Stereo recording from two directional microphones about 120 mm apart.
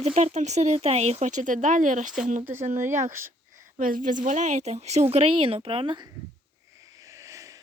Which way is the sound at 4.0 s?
90° right.